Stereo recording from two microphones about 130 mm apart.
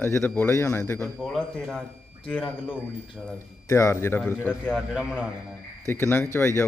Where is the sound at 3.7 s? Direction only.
25° left (ahead or behind).